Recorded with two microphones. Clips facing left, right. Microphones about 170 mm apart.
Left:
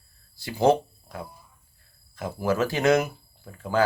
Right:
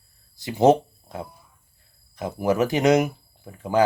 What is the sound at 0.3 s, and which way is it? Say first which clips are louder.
Speech: right 4 dB; 20° right (ahead or behind).